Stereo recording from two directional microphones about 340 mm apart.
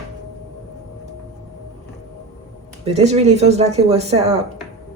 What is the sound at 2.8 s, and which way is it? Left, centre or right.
Speech, centre.